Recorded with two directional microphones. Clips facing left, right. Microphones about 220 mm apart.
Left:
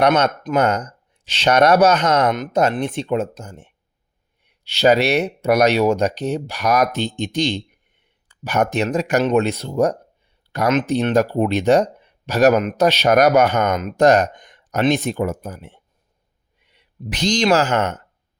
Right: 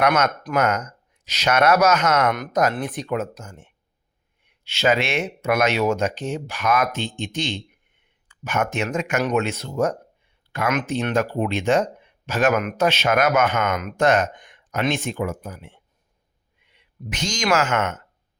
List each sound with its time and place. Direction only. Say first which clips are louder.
0.0 s speech: left 4 dB; 30° left (ahead or behind)